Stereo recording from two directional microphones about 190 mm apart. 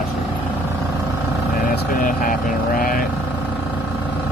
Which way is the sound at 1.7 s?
45° left (ahead or behind).